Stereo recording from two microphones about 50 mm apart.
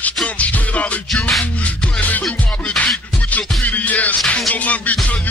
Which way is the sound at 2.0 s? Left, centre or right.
Left.